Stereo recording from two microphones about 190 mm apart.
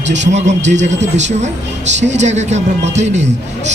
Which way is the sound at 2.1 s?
35° right (ahead or behind).